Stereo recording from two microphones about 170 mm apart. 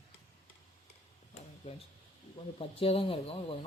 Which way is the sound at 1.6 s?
35° left (ahead or behind).